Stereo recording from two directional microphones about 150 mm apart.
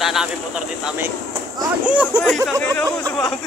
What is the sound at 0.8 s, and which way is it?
Speech, 15° right (ahead or behind).